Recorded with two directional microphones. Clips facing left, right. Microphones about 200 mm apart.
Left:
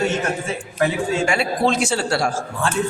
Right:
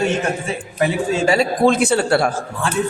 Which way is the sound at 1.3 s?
45° right (ahead or behind).